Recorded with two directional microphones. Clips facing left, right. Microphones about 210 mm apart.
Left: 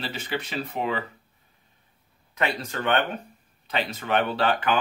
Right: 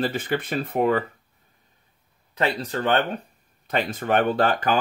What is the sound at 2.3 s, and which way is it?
Speech, 35° right (ahead or behind).